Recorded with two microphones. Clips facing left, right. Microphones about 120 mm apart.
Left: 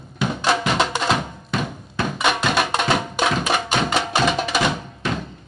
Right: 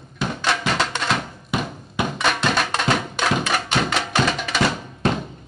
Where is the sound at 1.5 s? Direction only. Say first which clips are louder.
Even; 10° right (ahead or behind).